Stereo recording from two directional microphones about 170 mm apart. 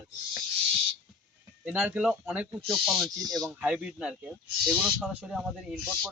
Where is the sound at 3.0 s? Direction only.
20° right (ahead or behind).